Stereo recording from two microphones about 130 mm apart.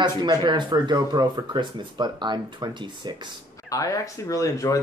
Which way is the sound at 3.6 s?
25° left (ahead or behind).